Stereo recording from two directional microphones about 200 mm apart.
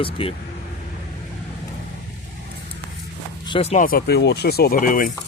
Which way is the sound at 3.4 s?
30° left (ahead or behind).